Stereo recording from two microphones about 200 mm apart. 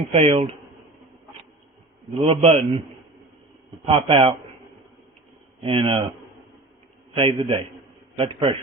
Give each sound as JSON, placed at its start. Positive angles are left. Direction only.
{"t": 0.1, "sound": "speech", "side_deg": -30}
{"t": 2.2, "sound": "a man's voice", "side_deg": -30}
{"t": 3.8, "sound": "a man's voice", "side_deg": -25}
{"t": 5.6, "sound": "a man's voice", "side_deg": -25}
{"t": 7.1, "sound": "a man's voice", "side_deg": -25}